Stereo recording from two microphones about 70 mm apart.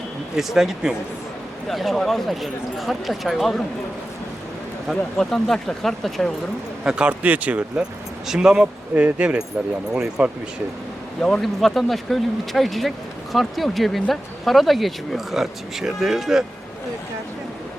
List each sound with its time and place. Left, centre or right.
0.3 s speech: centre
4.9 s speech: centre
6.8 s speech: centre
8.3 s speech: centre
11.2 s speech: centre